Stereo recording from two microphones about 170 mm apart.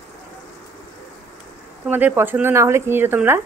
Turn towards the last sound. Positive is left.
turn(degrees=-10)  # may be behind; listen again after turning